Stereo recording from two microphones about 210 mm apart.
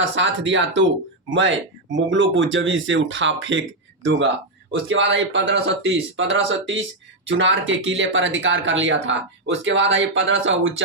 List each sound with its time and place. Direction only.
0.0 s speech: 60° right (ahead or behind)